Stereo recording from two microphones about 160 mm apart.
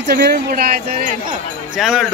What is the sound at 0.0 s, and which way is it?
Speech, 85° right.